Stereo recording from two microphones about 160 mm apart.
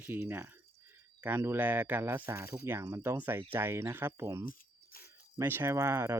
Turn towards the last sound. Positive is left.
turn(degrees=-15)  # may be behind; listen again after turning